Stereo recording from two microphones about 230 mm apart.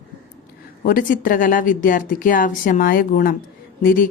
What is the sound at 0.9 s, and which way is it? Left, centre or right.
Speech, left.